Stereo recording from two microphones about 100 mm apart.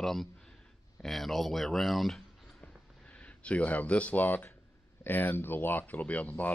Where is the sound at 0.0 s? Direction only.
5° left (ahead or behind).